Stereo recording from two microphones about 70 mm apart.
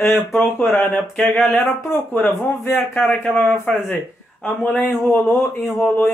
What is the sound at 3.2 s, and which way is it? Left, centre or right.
Speech, left.